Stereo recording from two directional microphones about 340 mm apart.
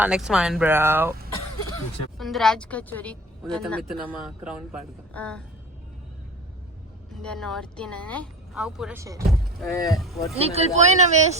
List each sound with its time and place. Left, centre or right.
0.0 s speech: centre
2.1 s speech: centre
7.1 s speech: centre
10.3 s speech: centre